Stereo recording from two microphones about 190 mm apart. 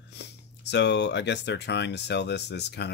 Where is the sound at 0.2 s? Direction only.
65° left (ahead or behind).